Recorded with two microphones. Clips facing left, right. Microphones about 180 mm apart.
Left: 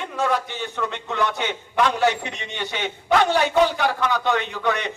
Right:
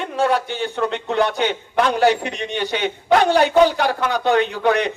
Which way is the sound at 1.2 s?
65° right (ahead or behind).